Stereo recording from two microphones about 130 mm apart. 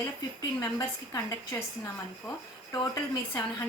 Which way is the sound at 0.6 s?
25° left (ahead or behind).